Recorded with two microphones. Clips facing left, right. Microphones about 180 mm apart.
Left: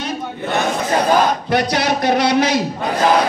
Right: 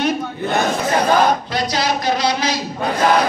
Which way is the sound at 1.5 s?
65° left (ahead or behind).